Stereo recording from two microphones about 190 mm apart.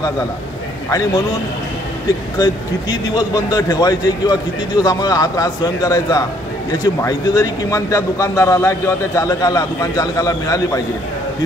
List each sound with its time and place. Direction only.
0.8 s a man's voice: 20° left (ahead or behind)
2.3 s a man's voice: 20° left (ahead or behind)